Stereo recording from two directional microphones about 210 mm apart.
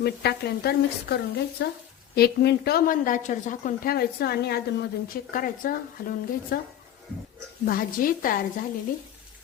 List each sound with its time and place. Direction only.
0.0 s a woman's voice: 50° left (ahead or behind)
7.6 s a woman's voice: 45° left (ahead or behind)